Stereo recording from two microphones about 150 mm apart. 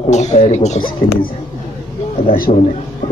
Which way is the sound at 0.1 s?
50° left (ahead or behind).